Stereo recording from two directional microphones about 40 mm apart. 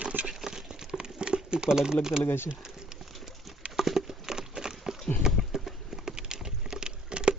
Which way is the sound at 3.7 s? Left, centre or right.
Centre.